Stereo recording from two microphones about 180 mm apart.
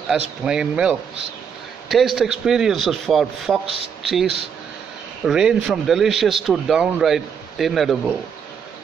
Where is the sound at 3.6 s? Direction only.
30° right (ahead or behind).